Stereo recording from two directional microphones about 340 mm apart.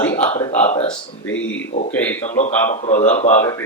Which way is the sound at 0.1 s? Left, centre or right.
Centre.